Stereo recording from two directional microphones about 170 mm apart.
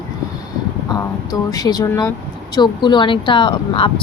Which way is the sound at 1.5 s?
20° left (ahead or behind).